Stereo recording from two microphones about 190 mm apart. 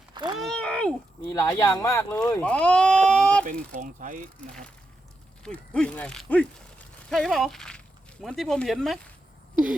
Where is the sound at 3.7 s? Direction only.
45° right (ahead or behind).